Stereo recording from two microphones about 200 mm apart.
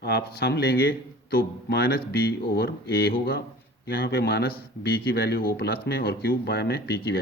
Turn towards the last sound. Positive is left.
turn(degrees=50)  # may be behind; listen again after turning